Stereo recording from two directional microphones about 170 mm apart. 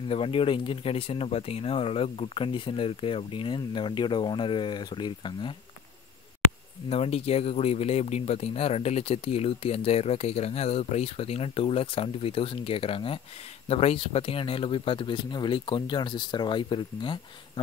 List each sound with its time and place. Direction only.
0.1 s speech: 35° left (ahead or behind)
6.9 s speech: 35° left (ahead or behind)